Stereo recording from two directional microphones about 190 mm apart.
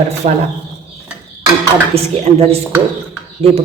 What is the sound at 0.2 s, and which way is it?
Speech, 35° right (ahead or behind).